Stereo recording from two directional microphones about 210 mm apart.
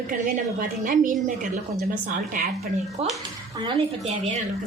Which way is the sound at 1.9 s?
40° right (ahead or behind).